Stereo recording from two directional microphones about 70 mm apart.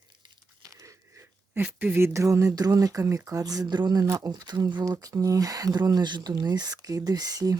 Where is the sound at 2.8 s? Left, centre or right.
Right.